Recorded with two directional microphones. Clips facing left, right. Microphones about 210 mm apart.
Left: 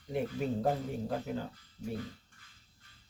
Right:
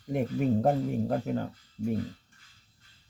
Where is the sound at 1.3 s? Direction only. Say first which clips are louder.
Right 6 dB; 55° right (ahead or behind).